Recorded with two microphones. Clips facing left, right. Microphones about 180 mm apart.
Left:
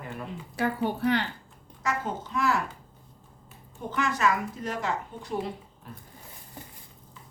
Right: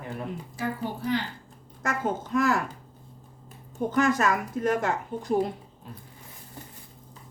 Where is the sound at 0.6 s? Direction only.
65° left (ahead or behind).